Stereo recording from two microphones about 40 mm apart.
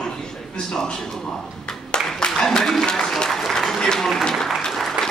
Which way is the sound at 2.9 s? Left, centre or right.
Centre.